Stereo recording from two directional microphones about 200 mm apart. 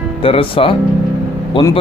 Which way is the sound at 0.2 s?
25° left (ahead or behind).